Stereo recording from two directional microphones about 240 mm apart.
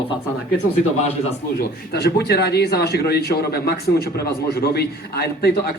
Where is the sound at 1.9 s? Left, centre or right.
Left.